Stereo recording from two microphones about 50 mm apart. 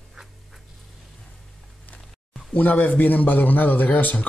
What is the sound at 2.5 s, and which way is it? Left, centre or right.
A man's voice, left.